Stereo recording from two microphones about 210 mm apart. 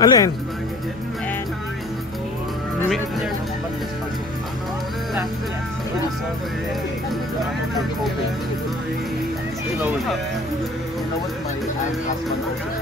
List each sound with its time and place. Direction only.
0.0 s speech: 20° left (ahead or behind)